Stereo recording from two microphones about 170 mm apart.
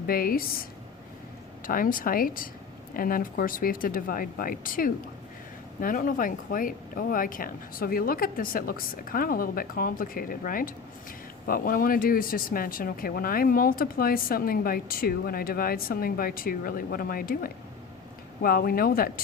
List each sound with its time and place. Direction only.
0.1 s speech: 60° left (ahead or behind)